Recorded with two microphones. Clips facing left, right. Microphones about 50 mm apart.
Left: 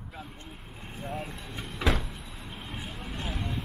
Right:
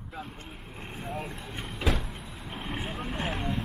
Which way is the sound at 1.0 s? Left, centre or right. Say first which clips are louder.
Even; centre.